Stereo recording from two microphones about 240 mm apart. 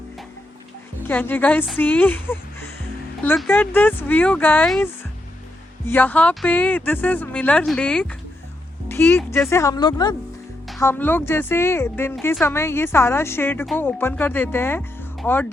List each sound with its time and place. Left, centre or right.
1.0 s speech: centre